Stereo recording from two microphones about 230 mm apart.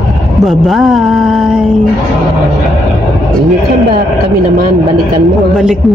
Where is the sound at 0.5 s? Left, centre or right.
Centre.